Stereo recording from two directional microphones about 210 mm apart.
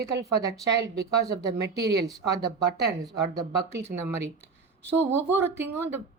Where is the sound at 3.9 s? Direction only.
45° right (ahead or behind).